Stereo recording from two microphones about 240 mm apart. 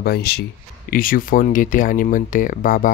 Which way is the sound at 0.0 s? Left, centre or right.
Left.